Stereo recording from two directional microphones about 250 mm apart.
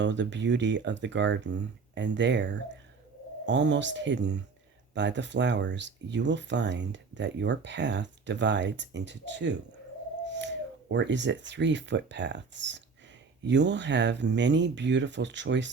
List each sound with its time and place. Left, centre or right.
0.0 s speech: right